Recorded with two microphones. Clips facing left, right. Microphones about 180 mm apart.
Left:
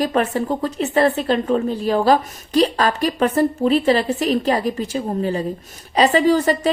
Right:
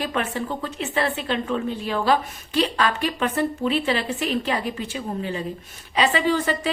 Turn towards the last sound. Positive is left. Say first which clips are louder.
# left 6 dB
turn(degrees=40)  # may be behind; listen again after turning